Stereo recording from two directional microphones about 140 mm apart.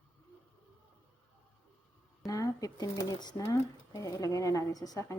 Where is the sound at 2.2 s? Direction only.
25° left (ahead or behind).